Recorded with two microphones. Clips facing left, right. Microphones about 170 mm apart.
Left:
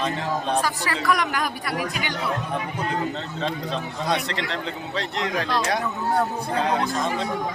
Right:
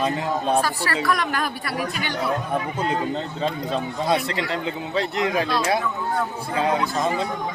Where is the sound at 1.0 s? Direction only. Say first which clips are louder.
Left 2 dB; 15° left (ahead or behind).